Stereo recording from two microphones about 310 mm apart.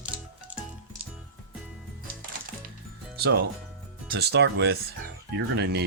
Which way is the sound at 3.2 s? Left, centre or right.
Right.